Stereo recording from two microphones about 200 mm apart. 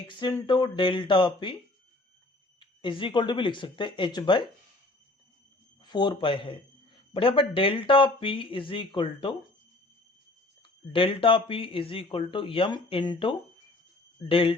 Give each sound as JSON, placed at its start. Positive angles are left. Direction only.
{"t": 0.1, "sound": "speech", "side_deg": 20}
{"t": 2.6, "sound": "speech", "side_deg": 25}
{"t": 5.8, "sound": "speech", "side_deg": 20}
{"t": 10.9, "sound": "speech", "side_deg": 25}